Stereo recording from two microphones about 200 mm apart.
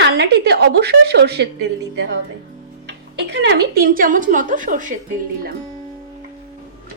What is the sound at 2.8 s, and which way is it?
A woman's voice, 55° right (ahead or behind).